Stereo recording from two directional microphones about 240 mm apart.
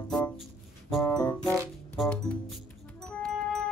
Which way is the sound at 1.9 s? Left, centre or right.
Centre.